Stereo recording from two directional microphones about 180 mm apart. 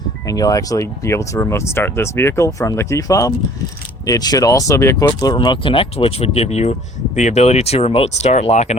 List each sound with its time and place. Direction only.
0.3 s speech: 20° left (ahead or behind); by 8.7 s 35° left (ahead or behind)